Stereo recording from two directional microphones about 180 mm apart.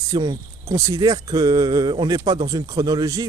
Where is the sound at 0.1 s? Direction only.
20° right (ahead or behind).